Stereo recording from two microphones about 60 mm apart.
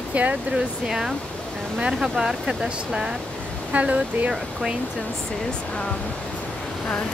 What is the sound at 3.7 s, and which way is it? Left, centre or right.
Speech, right.